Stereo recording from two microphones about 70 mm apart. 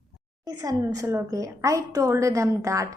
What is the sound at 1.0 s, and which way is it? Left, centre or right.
A woman's voice, right.